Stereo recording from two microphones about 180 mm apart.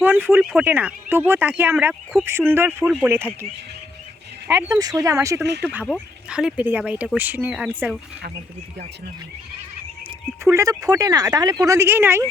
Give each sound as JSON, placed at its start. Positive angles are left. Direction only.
{"t": 0.0, "sound": "speech", "side_deg": -10}
{"t": 4.4, "sound": "speech", "side_deg": -15}
{"t": 6.2, "sound": "speech", "side_deg": -5}
{"t": 10.4, "sound": "speech", "side_deg": -15}